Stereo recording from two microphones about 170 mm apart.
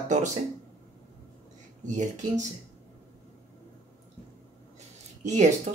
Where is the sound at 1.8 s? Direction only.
45° right (ahead or behind).